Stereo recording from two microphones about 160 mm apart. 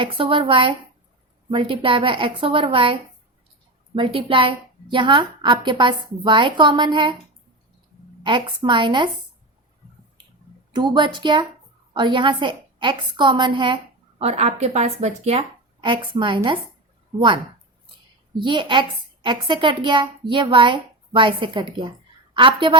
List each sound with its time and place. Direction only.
0.0 s a woman's voice: 35° right (ahead or behind)
8.2 s a woman's voice: 30° right (ahead or behind)
10.7 s a woman's voice: 30° right (ahead or behind)
14.2 s a woman's voice: 40° right (ahead or behind)